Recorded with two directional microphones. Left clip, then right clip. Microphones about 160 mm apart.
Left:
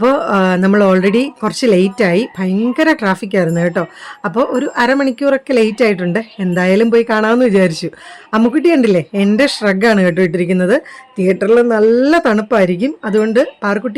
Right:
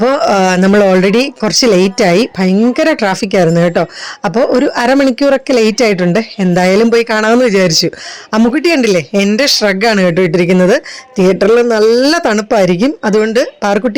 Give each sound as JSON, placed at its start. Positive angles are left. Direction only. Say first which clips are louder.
{"t": 0.0, "sound": "speech", "louder": "right 3 dB", "side_deg": -20}